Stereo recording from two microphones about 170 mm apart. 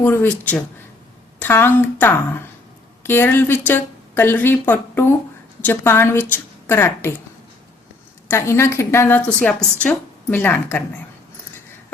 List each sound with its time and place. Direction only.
0.0 s a woman's voice: 15° left (ahead or behind)
8.3 s a woman's voice: 15° left (ahead or behind)